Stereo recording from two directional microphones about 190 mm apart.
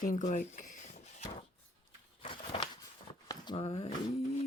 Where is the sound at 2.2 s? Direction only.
25° left (ahead or behind).